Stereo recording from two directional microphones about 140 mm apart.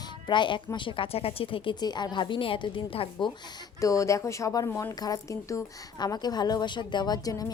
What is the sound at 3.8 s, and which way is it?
Speech, 20° left (ahead or behind).